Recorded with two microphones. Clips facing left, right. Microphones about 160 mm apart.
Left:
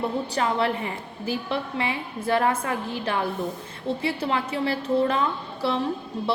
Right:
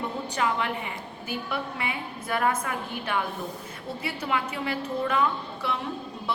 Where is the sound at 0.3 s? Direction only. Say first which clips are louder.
Left 2 dB; 35° left (ahead or behind).